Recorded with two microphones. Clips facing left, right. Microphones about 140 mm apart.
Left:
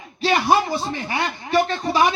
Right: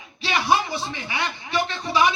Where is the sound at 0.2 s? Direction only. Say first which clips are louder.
Left 4 dB; 45° left (ahead or behind).